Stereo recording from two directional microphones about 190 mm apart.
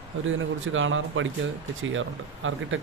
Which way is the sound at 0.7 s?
90° right.